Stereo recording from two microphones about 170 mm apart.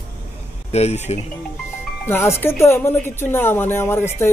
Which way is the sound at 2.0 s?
15° left (ahead or behind).